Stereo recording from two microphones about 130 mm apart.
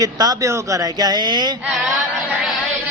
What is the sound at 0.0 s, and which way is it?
Speech, 30° right (ahead or behind).